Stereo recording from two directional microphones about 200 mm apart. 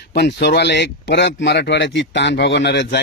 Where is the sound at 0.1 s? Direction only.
55° left (ahead or behind).